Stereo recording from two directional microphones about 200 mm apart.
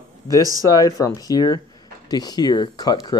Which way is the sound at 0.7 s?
20° left (ahead or behind).